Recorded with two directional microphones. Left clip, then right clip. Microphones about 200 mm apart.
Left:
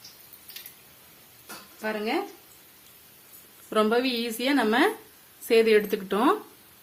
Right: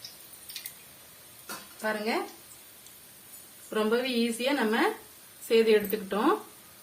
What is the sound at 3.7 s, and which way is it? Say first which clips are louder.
A woman's voice: left 4 dB; 55° left (ahead or behind).